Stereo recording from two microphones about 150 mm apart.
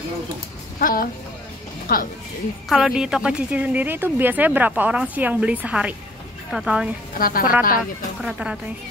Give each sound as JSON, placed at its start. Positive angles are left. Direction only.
{"t": 0.7, "sound": "speech", "side_deg": 75}
{"t": 1.9, "sound": "speech", "side_deg": 90}
{"t": 2.7, "sound": "speech", "side_deg": -5}
{"t": 7.2, "sound": "a woman's voice", "side_deg": 75}
{"t": 8.2, "sound": "speech", "side_deg": -5}